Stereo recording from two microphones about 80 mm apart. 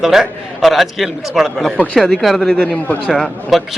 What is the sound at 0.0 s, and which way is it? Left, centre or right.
A man's voice, centre.